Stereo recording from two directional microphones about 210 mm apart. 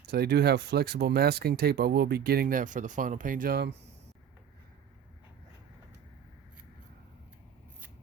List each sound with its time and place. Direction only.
0.1 s speech: 50° right (ahead or behind)